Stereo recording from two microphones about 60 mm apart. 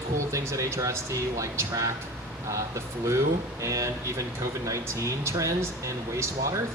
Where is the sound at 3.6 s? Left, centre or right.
Right.